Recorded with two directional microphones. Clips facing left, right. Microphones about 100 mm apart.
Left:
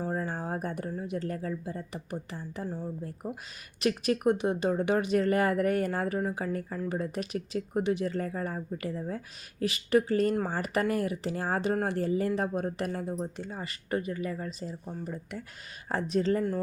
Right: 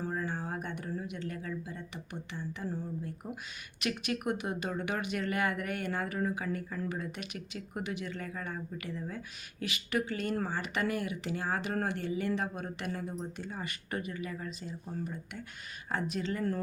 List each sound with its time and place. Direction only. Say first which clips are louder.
0.0 s speech: left 3 dB; 35° left (ahead or behind)
2.6 s speech: left 2 dB; 20° left (ahead or behind)
3.0 s speech: left 3 dB; 35° left (ahead or behind)